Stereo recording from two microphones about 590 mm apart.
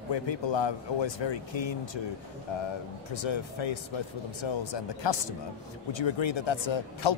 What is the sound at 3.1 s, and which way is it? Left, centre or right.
Speech, left.